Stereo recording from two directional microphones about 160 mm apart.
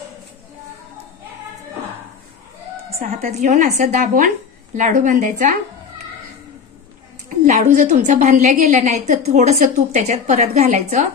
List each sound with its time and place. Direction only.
3.1 s a woman's voice: 45° right (ahead or behind)
7.2 s a woman's voice: 50° right (ahead or behind)